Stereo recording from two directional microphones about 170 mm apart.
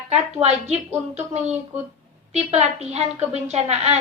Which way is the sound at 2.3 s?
40° right (ahead or behind).